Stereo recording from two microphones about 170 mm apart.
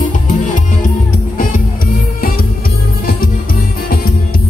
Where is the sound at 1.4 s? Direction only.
60° left (ahead or behind).